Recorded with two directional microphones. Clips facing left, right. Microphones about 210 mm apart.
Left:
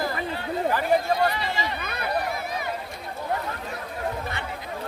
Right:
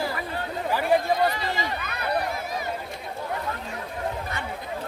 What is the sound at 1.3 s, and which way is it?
Speech, 45° right (ahead or behind).